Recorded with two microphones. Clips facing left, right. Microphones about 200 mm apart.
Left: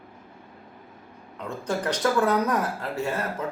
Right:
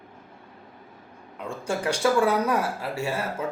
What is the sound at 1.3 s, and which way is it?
A man's voice, 10° right (ahead or behind).